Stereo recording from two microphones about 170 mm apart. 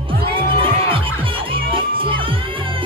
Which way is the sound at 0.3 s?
30° right (ahead or behind).